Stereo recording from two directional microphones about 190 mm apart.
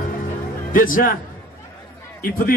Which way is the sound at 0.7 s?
45° left (ahead or behind).